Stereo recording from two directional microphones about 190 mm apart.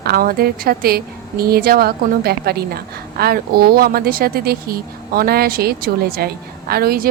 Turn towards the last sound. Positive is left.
turn(degrees=-50)  # may be behind; listen again after turning